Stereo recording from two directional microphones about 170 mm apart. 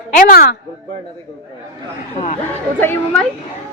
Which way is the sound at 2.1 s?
40° left (ahead or behind).